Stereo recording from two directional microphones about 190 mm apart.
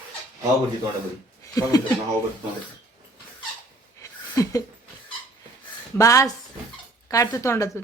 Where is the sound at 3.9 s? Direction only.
15° left (ahead or behind).